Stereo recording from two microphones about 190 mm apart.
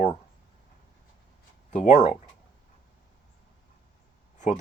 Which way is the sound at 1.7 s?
40° left (ahead or behind).